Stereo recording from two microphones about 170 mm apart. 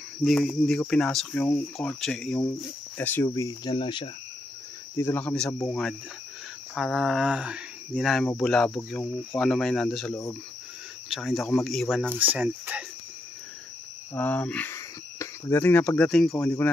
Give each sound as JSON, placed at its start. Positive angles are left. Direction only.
{"t": 0.2, "sound": "speech", "side_deg": 0}
{"t": 3.3, "sound": "speech", "side_deg": 20}
{"t": 4.9, "sound": "speech", "side_deg": 15}
{"t": 5.5, "sound": "speech", "side_deg": 15}
{"t": 6.7, "sound": "speech", "side_deg": 0}
{"t": 12.2, "sound": "speech", "side_deg": -10}
{"t": 14.1, "sound": "speech", "side_deg": 10}